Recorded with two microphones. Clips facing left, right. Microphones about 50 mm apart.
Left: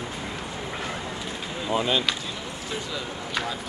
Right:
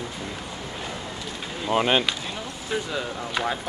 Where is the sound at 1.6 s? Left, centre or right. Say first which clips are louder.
Right 3 dB; right.